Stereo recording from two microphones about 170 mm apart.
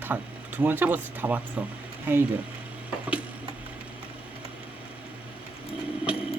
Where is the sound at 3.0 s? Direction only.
10° right (ahead or behind).